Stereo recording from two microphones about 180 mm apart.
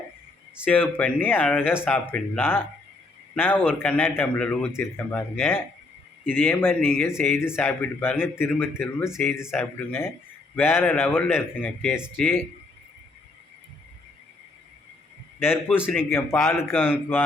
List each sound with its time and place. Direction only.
0.9 s speech: 10° left (ahead or behind)
11.9 s speech: 5° right (ahead or behind)
15.4 s speech: 10° left (ahead or behind)